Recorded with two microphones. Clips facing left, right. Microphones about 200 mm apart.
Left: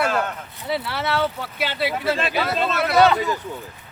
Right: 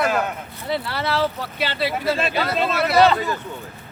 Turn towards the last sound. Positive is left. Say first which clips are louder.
# left 1 dB
turn(degrees=15)  # may be behind; listen again after turning